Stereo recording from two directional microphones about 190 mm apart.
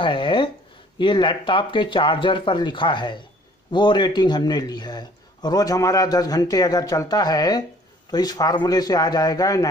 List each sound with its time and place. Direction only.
0.0 s a man's voice: 25° left (ahead or behind)